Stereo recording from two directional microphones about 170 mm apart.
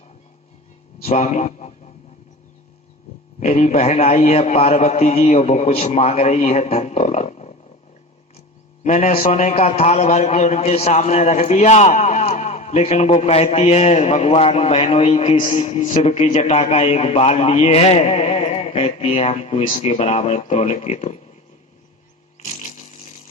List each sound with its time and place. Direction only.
1.0 s a man's voice: 40° left (ahead or behind)
3.4 s a man's voice: 35° left (ahead or behind)
8.8 s a man's voice: 40° left (ahead or behind)
22.4 s fart: 45° left (ahead or behind)